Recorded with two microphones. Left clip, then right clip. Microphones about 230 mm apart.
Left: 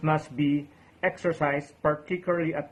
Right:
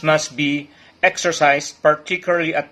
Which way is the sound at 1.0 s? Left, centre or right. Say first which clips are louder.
Right 11 dB; centre.